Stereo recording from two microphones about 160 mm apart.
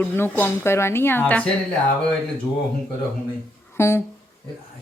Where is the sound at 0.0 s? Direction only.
15° left (ahead or behind).